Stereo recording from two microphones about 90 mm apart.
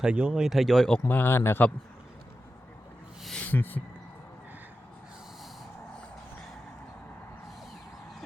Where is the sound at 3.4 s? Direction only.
20° left (ahead or behind).